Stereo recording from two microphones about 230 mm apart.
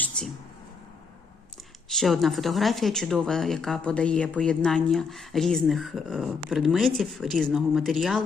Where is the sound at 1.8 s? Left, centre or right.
Centre.